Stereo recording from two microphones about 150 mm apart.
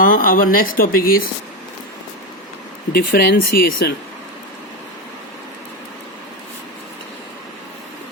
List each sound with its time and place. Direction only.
0.0 s speech: 70° left (ahead or behind)
2.9 s speech: 85° left